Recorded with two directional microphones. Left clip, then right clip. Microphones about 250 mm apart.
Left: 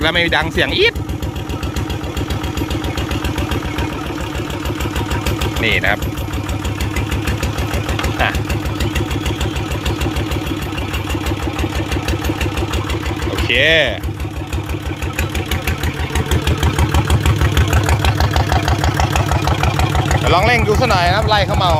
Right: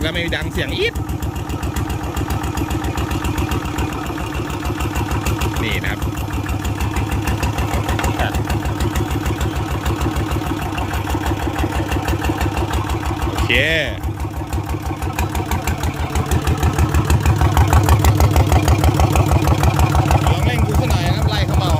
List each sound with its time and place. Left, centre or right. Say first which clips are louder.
0.0 s speech: left 7 dB; centre
5.6 s speech: left 12 dB; centre
13.5 s speech: left 4 dB; centre
17.5 s vehicle: right 1 dB; centre
17.8 s vehicle: even; right
20.3 s speech: left 9 dB; centre